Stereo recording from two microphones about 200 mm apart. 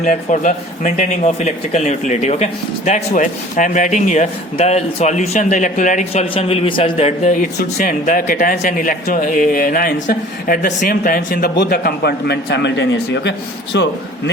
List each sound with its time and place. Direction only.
0.0 s a man's voice: 40° left (ahead or behind); by 13.9 s 60° left (ahead or behind)